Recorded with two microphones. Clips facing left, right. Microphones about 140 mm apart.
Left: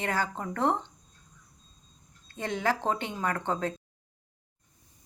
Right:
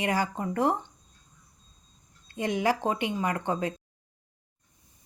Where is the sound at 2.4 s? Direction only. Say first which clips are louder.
Right 3 dB; 15° right (ahead or behind).